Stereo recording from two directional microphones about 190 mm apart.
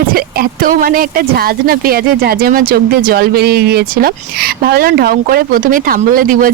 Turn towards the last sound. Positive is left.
turn(degrees=-45)  # may be behind; listen again after turning